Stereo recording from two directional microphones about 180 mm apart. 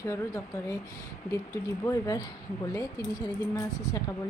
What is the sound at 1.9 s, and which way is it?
Speech, 20° left (ahead or behind).